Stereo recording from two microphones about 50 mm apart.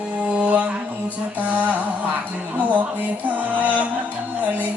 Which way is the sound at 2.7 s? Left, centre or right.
Right.